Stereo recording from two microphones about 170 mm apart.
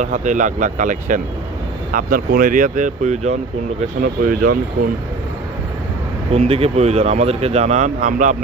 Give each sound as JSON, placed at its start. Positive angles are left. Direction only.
{"t": 0.0, "sound": "speech", "side_deg": -45}
{"t": 4.0, "sound": "speech", "side_deg": -55}
{"t": 6.3, "sound": "speech", "side_deg": -35}